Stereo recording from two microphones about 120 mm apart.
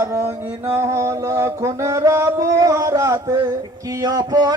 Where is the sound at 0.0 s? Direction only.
20° right (ahead or behind).